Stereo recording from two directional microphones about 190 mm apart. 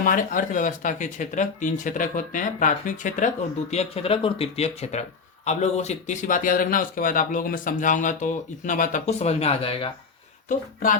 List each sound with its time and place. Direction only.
0.0 s speech: 45° left (ahead or behind); by 9.9 s 30° left (ahead or behind)